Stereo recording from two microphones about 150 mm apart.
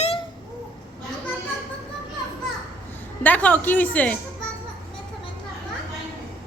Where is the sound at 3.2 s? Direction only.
10° left (ahead or behind).